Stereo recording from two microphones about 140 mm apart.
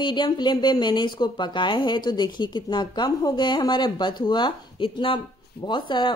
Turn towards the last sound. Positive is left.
turn(degrees=35)  # may be behind; listen again after turning